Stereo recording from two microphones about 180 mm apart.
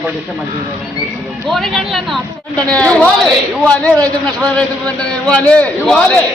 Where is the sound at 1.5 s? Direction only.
Centre (ahead or behind).